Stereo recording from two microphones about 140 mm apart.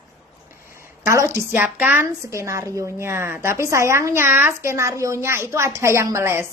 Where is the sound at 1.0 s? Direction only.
20° right (ahead or behind).